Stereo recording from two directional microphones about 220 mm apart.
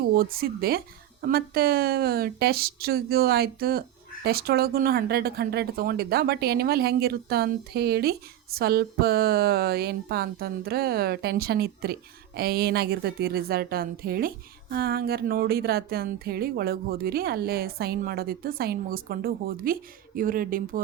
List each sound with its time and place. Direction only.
0.1 s a woman's voice: 45° right (ahead or behind)